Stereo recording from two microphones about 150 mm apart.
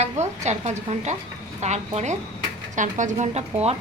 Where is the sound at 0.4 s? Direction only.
50° right (ahead or behind).